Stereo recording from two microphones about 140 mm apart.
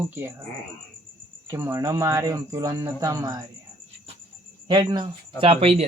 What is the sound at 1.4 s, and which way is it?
Speech, 20° right (ahead or behind).